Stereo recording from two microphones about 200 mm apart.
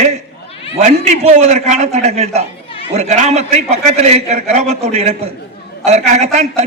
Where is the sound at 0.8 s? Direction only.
40° right (ahead or behind).